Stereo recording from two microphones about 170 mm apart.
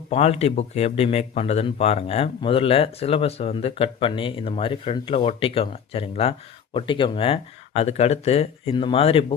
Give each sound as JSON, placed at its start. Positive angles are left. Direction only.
{"t": 0.1, "sound": "speech", "side_deg": 35}